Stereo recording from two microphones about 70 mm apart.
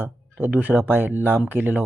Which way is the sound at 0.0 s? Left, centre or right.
Right.